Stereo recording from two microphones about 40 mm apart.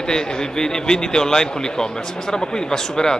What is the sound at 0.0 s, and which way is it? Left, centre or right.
Speech, centre.